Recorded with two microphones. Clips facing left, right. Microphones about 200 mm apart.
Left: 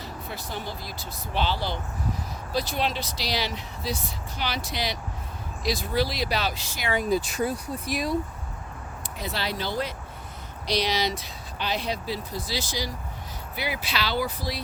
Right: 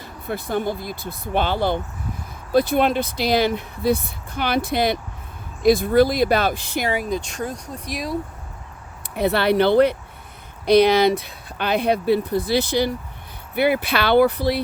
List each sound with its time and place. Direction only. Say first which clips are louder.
0.0 s speech: right 7 dB; 55° right (ahead or behind)
7.1 s speech: left 1 dB; 5° left (ahead or behind)
9.1 s speech: right 14 dB; 60° right (ahead or behind)